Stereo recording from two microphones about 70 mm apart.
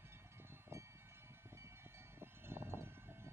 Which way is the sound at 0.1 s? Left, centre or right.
Right.